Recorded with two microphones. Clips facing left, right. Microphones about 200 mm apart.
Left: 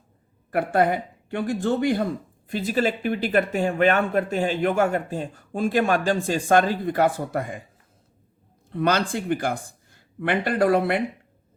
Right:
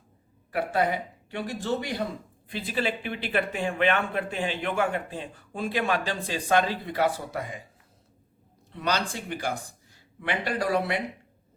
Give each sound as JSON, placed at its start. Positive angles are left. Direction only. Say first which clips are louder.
{"t": 0.5, "sound": "speech", "louder": "left 5 dB", "side_deg": 50}
{"t": 8.7, "sound": "speech", "louder": "left 6 dB", "side_deg": 50}